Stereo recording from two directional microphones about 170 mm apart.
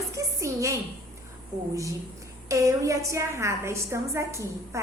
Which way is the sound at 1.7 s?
20° right (ahead or behind).